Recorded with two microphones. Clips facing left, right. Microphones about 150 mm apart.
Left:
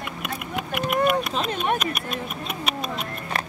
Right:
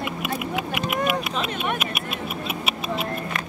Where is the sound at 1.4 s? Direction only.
40° left (ahead or behind).